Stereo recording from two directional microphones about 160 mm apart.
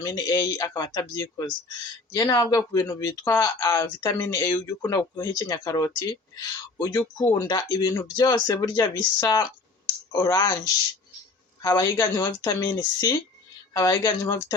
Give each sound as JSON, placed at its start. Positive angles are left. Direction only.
{"t": 0.0, "sound": "speech", "side_deg": 25}
{"t": 11.6, "sound": "speech", "side_deg": 25}